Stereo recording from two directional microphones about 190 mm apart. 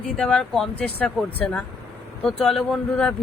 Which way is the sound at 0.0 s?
5° left (ahead or behind).